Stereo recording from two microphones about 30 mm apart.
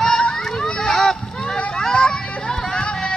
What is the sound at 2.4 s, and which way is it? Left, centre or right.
Music, left.